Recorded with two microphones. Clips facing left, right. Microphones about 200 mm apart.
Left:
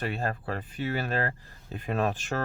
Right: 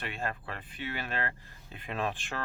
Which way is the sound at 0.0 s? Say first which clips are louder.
Left 6 dB; 40° left (ahead or behind).